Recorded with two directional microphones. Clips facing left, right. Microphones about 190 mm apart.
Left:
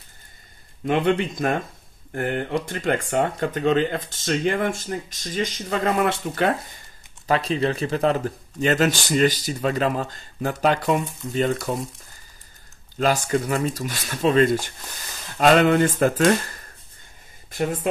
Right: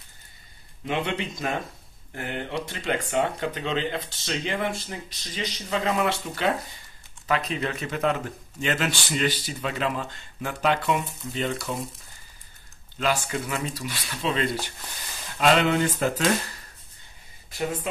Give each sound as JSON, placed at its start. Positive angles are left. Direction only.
{"t": 0.8, "sound": "speech", "side_deg": 50}
{"t": 7.2, "sound": "speech", "side_deg": 35}
{"t": 12.9, "sound": "speech", "side_deg": 40}